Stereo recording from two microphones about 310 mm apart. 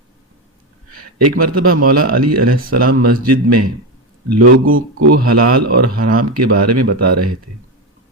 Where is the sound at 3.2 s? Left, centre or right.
Right.